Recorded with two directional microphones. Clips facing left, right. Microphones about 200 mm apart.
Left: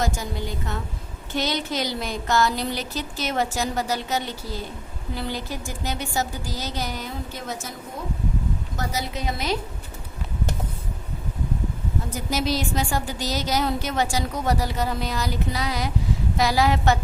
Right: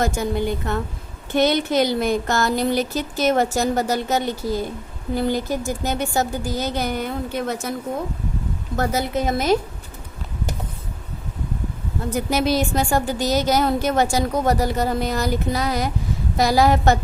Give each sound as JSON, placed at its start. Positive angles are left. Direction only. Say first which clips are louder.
{"t": 0.0, "sound": "a woman's voice", "louder": "right 6 dB", "side_deg": -55}
{"t": 8.7, "sound": "a woman's voice", "louder": "right 11 dB", "side_deg": -55}
{"t": 12.1, "sound": "a woman's voice", "louder": "right 6 dB", "side_deg": -55}